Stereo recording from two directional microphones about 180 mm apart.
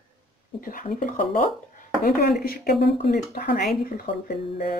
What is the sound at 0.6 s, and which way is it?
Speech, 50° left (ahead or behind).